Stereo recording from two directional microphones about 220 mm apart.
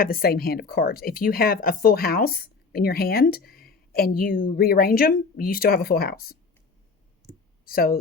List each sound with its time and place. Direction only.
0.0 s speech: 40° left (ahead or behind)
7.3 s clicking: 10° left (ahead or behind)
7.6 s speech: 40° left (ahead or behind)